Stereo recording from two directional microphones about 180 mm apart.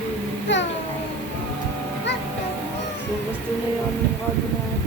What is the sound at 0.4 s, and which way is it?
Babbling, 90° left.